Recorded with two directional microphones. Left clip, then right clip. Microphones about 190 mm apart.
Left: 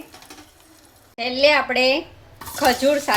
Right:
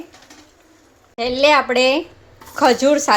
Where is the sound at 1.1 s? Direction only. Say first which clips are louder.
Right 3 dB; 35° right (ahead or behind).